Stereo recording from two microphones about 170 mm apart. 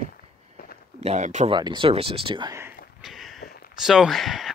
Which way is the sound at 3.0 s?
Centre (ahead or behind).